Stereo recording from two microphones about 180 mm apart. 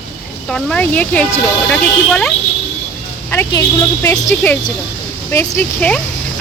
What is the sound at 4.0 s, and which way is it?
Speech, 10° left (ahead or behind).